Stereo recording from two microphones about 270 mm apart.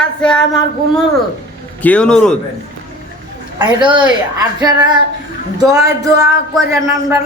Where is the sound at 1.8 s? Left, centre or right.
Centre.